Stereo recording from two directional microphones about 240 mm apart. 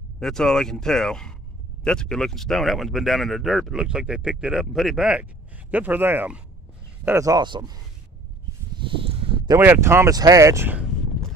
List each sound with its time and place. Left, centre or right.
0.2 s speech: centre
8.7 s a sound: right
9.6 s speech: centre